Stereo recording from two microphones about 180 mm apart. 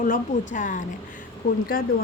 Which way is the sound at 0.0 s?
45° left (ahead or behind).